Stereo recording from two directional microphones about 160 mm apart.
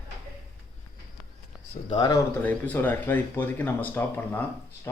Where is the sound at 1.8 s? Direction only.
25° left (ahead or behind).